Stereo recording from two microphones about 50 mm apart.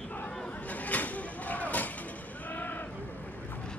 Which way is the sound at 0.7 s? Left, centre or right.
Left.